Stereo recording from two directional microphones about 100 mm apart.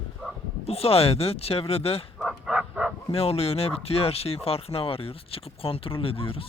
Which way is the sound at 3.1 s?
85° left.